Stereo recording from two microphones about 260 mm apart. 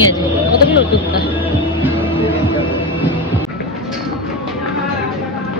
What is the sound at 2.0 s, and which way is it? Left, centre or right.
Music, centre.